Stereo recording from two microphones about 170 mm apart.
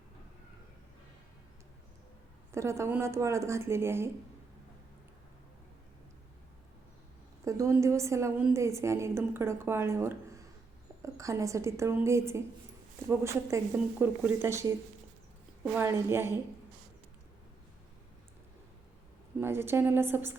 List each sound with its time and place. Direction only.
2.5 s a woman's voice: 15° right (ahead or behind)
7.4 s a woman's voice: 20° right (ahead or behind)
15.7 s a woman's voice: 15° right (ahead or behind)
19.4 s a woman's voice: 15° right (ahead or behind)